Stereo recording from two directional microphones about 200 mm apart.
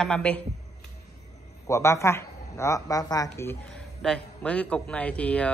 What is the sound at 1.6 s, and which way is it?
Speech, 15° left (ahead or behind).